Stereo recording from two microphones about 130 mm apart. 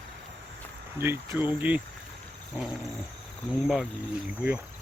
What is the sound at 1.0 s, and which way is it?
Speech, 15° right (ahead or behind).